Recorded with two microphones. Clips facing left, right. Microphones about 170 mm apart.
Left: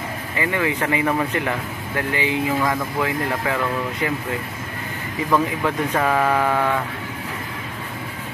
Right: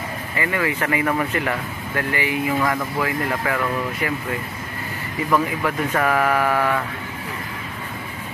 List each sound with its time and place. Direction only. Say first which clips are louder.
0.4 s speech: left 1 dB; 20° left (ahead or behind)
5.3 s speech: left 1 dB; 15° left (ahead or behind)